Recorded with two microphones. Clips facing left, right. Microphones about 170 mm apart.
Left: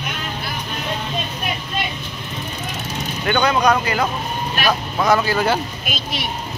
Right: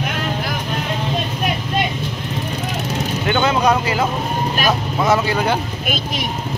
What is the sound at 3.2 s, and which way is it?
Vehicle, 20° right (ahead or behind).